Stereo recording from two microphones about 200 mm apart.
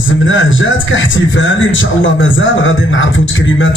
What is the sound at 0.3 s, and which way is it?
A man's voice, 70° left (ahead or behind).